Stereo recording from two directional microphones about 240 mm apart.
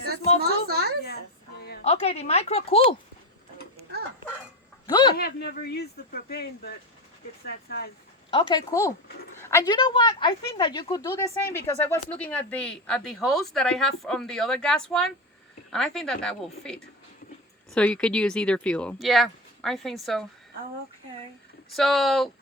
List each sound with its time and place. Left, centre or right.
0.3 s a sound: right
1.8 s speech: left
4.9 s a man's voice: centre
5.1 s speech: left
8.3 s a woman's voice: left; by 20.2 s centre
21.8 s a woman's voice: centre